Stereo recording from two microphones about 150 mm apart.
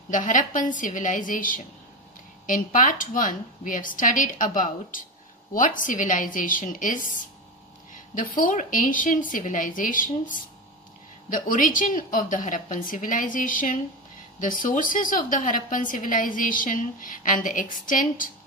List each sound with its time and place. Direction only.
0.1 s a woman's voice: 60° left (ahead or behind)